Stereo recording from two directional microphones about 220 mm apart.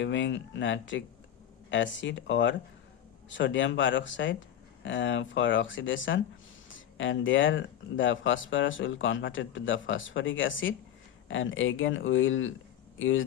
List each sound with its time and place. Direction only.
0.0 s speech: 55° left (ahead or behind)